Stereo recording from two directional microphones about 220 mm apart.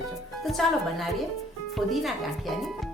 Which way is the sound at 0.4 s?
Centre (ahead or behind).